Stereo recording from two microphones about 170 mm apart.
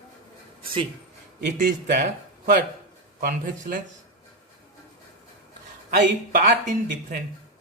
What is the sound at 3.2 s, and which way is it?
Speech, 55° right (ahead or behind).